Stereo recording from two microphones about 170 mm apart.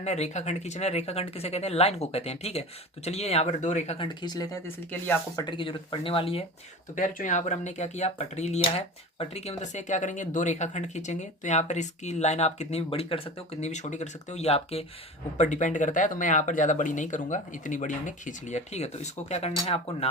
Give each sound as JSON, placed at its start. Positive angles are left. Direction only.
{"t": 0.0, "sound": "speech", "side_deg": 40}
{"t": 4.9, "sound": "speech", "side_deg": 10}
{"t": 5.5, "sound": "speech", "side_deg": 30}
{"t": 6.9, "sound": "speech", "side_deg": 50}